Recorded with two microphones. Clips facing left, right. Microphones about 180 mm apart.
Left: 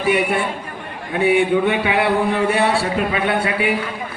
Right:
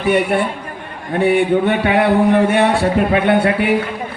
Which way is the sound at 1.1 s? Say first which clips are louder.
Right 2 dB; 55° right (ahead or behind).